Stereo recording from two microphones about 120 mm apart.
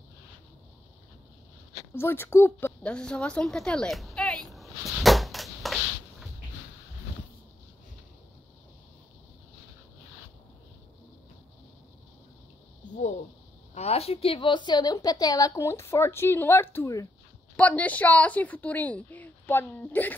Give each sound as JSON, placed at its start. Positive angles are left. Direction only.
{"t": 2.0, "sound": "a woman's voice", "side_deg": 20}
{"t": 2.8, "sound": "a sound", "side_deg": 10}
{"t": 13.7, "sound": "a woman's voice", "side_deg": 60}
{"t": 17.6, "sound": "a woman's voice", "side_deg": 10}